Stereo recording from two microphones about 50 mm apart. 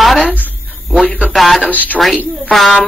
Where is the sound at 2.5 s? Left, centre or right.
Centre.